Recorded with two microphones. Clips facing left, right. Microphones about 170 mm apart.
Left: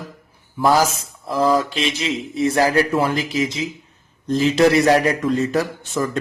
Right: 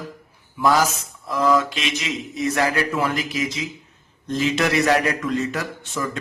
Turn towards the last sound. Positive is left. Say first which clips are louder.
# left 5 dB
turn(degrees=35)  # may be behind; listen again after turning